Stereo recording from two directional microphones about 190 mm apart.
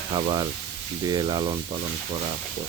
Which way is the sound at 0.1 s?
25° right (ahead or behind).